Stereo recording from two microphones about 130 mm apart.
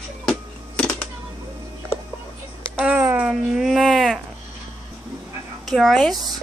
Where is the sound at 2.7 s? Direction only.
10° right (ahead or behind).